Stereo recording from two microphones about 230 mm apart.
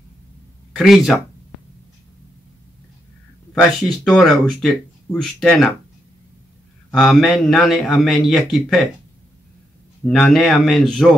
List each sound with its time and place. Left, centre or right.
0.7 s a man's voice: centre
4.0 s a man's voice: centre
6.9 s a man's voice: centre
10.0 s a man's voice: centre